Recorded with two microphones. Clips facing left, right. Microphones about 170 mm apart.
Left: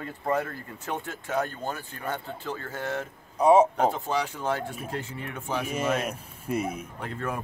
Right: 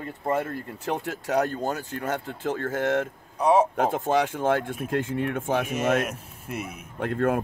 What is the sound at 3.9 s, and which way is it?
Speech, 50° right (ahead or behind).